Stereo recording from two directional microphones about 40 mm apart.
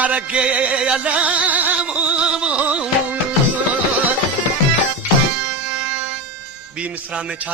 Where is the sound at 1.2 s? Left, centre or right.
Right.